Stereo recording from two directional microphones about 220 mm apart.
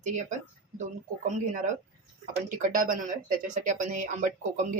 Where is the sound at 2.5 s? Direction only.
35° right (ahead or behind).